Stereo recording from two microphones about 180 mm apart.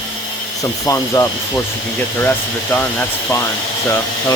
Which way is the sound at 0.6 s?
20° left (ahead or behind).